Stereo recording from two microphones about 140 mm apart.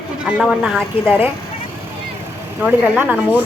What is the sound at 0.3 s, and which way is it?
Speech, 5° right (ahead or behind).